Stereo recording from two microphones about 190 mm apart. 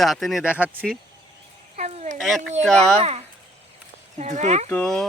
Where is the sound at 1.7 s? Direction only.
35° right (ahead or behind).